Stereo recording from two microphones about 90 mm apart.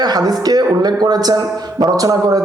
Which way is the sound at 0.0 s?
45° right (ahead or behind).